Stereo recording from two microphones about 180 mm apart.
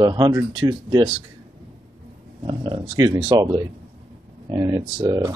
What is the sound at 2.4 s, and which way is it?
Speech, 30° right (ahead or behind).